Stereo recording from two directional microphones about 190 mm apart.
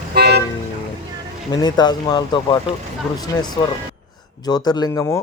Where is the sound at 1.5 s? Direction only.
20° left (ahead or behind).